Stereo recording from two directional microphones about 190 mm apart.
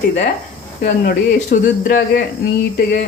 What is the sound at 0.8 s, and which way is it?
Speech, 45° left (ahead or behind).